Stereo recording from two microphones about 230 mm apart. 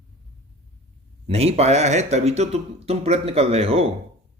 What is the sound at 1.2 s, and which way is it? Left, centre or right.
Speech, right.